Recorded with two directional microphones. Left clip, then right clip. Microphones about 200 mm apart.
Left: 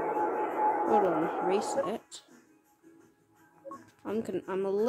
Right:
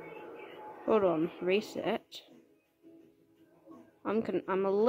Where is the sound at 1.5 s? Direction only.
10° right (ahead or behind).